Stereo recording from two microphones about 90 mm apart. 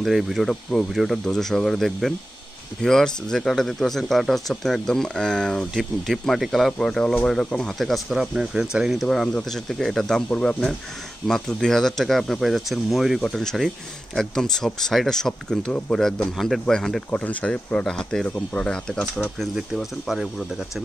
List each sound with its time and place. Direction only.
0.0 s speech: centre (ahead or behind)
19.5 s speech: 5° right (ahead or behind)